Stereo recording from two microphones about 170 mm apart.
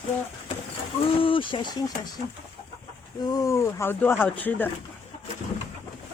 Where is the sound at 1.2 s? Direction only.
30° left (ahead or behind).